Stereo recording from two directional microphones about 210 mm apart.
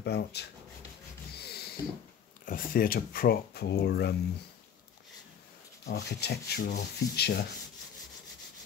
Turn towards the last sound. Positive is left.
turn(degrees=50)  # may be behind; listen again after turning